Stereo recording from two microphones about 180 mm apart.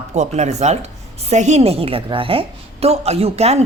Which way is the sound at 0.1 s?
40° right (ahead or behind).